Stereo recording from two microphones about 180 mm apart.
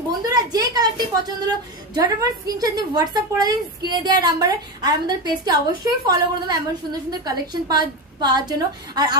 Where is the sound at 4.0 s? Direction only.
20° right (ahead or behind).